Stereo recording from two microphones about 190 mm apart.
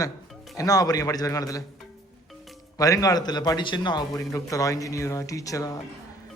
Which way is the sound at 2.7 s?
20° left (ahead or behind).